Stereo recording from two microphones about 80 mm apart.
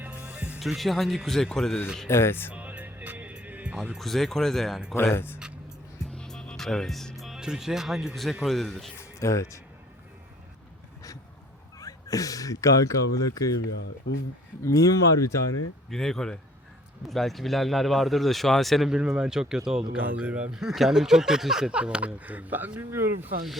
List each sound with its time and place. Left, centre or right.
0.3 s music: centre
0.6 s speech: centre
2.0 s speech: left
2.5 s music: centre
3.9 s speech: centre
4.9 s speech: left
5.4 s a sound: centre
6.1 s music: centre
8.4 s speech: centre
9.0 s speech: left
11.8 s speech: left
14.6 s speech: left
15.9 s speech: centre
20.0 s speech: centre